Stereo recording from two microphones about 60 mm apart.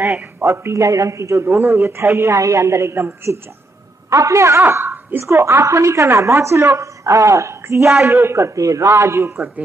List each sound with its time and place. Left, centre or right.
0.4 s a man's voice: right
4.1 s a woman's voice: right
4.6 s a woman's voice: right
5.2 s a woman's voice: right